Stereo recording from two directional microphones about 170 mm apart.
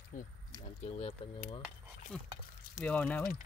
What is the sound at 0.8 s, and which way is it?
Speech, 35° left (ahead or behind).